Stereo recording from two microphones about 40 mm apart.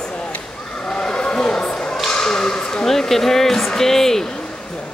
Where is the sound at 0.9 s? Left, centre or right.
Left.